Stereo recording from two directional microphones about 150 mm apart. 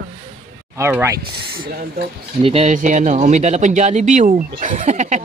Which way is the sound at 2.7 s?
55° right (ahead or behind).